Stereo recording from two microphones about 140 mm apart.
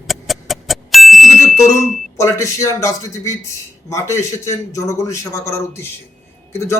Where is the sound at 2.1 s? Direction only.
20° left (ahead or behind).